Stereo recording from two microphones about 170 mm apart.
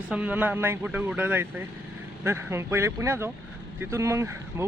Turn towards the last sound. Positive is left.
turn(degrees=-15)  # may be behind; listen again after turning